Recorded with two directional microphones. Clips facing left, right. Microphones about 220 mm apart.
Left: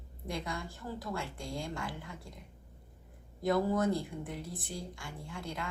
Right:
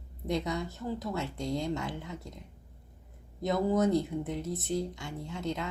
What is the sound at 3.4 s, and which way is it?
Speech, 20° right (ahead or behind).